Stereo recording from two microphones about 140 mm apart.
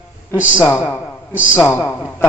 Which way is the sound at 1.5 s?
15° left (ahead or behind).